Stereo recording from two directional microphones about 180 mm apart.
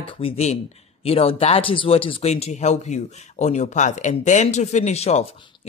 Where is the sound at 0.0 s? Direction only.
35° left (ahead or behind).